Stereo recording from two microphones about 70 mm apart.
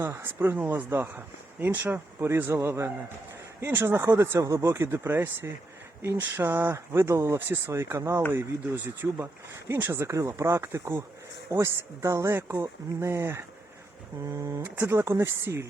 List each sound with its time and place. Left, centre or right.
0.2 s speech: right
2.2 s speech: right
4.4 s speech: right
8.3 s speech: right
12.5 s speech: right
13.1 s speech: right